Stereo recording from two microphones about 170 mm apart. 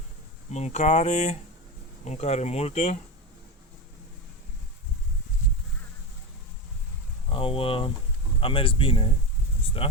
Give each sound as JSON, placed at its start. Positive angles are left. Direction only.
{"t": 0.5, "sound": "speech", "side_deg": 40}
{"t": 7.3, "sound": "speech", "side_deg": 30}